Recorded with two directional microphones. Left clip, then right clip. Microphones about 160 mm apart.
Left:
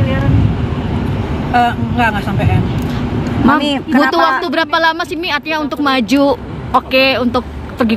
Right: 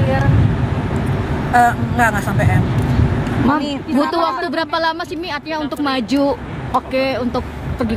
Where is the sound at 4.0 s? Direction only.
Centre (ahead or behind).